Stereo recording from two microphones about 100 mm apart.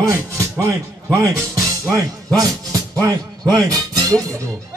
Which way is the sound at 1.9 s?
40° right (ahead or behind).